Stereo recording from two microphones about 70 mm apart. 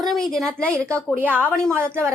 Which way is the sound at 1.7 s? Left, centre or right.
Right.